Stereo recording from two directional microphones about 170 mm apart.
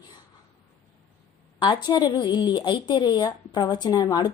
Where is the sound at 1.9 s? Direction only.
25° left (ahead or behind).